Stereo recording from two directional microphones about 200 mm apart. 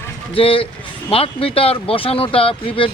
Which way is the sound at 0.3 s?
25° left (ahead or behind).